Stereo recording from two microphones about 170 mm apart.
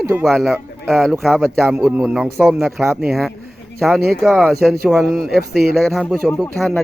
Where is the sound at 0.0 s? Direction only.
15° right (ahead or behind).